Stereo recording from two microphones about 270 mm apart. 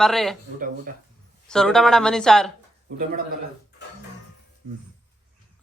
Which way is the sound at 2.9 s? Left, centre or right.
Right.